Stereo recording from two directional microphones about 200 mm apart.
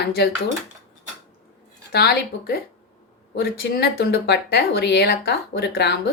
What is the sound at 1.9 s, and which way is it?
Speech, 50° left (ahead or behind).